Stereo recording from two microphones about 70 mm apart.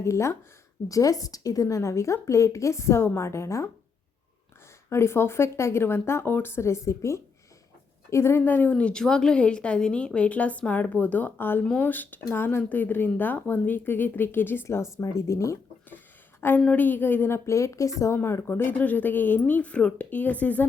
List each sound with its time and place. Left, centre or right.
0.0 s a woman's voice: left
0.9 s a woman's voice: left
4.9 s speech: left
8.7 s a woman's voice: centre; by 15.5 s left
16.4 s a woman's voice: left
18.2 s speech: left